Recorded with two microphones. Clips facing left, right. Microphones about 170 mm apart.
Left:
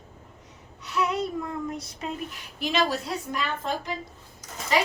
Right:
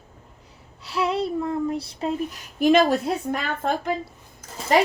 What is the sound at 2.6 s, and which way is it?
A woman's voice, 50° right (ahead or behind).